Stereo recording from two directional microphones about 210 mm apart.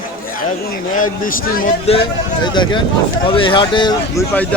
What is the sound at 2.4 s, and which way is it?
Speech, 20° left (ahead or behind).